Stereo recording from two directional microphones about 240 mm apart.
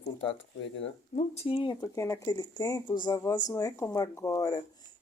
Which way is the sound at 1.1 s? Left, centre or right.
Left.